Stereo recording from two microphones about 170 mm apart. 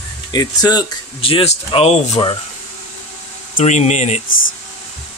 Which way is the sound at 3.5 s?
45° left (ahead or behind).